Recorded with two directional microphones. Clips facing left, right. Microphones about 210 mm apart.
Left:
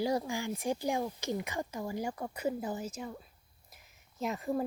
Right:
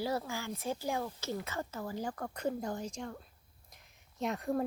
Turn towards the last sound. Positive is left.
turn(degrees=0)  # may be behind; listen again after turning